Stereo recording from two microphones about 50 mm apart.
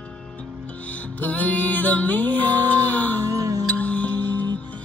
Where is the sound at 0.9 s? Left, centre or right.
Left.